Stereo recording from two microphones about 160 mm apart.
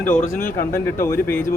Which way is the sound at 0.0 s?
10° left (ahead or behind).